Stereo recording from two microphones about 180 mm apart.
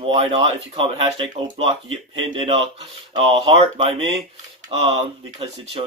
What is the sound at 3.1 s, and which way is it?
A man's voice, 25° right (ahead or behind).